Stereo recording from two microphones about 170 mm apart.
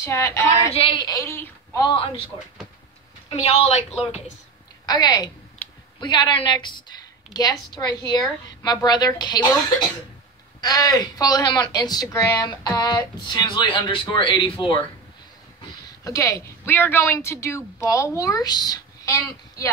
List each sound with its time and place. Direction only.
0.0 s a woman's voice: 15° left (ahead or behind)
0.7 s a woman's voice: 30° left (ahead or behind)
3.3 s a woman's voice: 35° left (ahead or behind)
4.8 s a woman's voice: 25° left (ahead or behind)
16.0 s a woman's voice: 20° left (ahead or behind)